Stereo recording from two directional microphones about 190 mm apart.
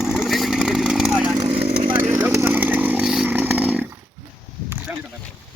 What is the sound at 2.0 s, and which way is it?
Chainsaw, 10° right (ahead or behind).